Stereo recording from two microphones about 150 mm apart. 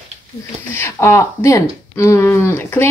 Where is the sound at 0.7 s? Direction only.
15° left (ahead or behind).